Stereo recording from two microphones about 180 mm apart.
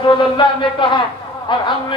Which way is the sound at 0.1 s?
25° left (ahead or behind).